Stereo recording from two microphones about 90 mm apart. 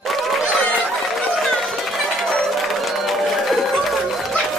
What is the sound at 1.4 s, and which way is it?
Run, centre (ahead or behind).